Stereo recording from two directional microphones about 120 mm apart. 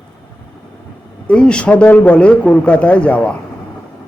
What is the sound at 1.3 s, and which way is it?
Speech, 10° left (ahead or behind).